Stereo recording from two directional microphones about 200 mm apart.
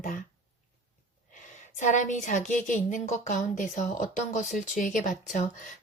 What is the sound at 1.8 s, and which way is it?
Speech, 40° left (ahead or behind).